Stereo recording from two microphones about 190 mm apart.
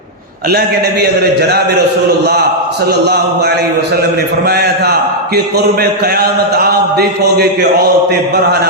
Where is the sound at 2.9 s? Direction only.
60° right (ahead or behind).